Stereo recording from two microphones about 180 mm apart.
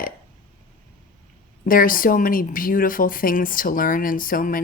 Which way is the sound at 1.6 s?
50° left (ahead or behind).